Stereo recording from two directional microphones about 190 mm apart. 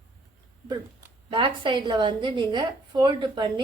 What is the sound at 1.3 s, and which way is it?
A woman's voice, 25° right (ahead or behind).